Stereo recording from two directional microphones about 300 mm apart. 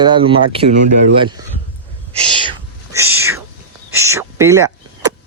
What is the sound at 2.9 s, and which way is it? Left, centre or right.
Whispering, centre.